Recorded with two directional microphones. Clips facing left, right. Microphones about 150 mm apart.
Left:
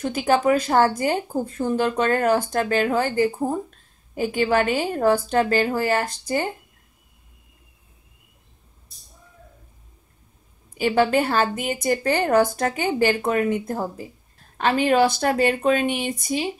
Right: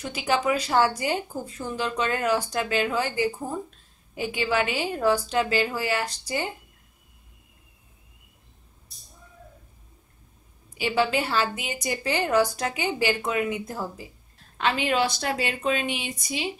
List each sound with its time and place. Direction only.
0.0 s speech: 50° left (ahead or behind)
10.7 s speech: 50° left (ahead or behind)